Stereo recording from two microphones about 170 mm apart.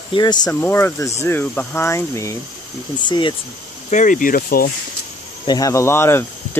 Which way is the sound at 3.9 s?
50° left (ahead or behind).